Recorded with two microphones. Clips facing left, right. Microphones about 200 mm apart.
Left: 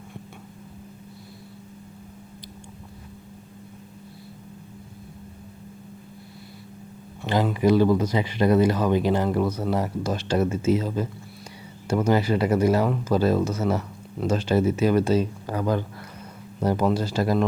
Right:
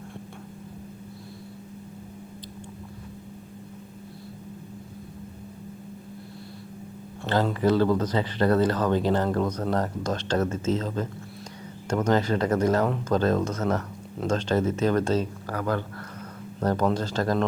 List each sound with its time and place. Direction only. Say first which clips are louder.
7.5 s speech: left 4 dB; 15° left (ahead or behind)